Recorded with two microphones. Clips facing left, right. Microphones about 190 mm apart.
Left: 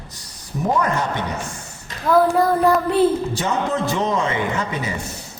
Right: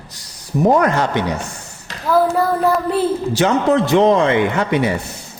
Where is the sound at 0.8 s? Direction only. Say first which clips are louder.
Right 5 dB; 80° right.